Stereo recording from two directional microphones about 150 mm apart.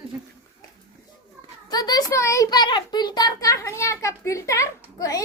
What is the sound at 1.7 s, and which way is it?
A child's voice, 25° left (ahead or behind).